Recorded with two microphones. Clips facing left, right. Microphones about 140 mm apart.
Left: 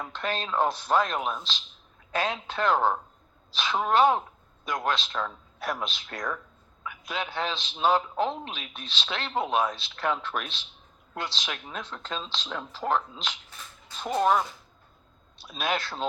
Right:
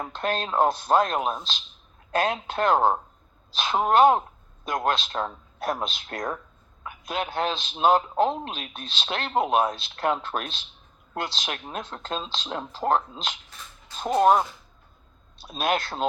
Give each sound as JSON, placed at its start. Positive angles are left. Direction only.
{"t": 0.1, "sound": "a man's voice", "side_deg": -50}